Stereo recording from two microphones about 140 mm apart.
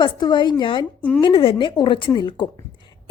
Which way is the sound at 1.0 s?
10° left (ahead or behind).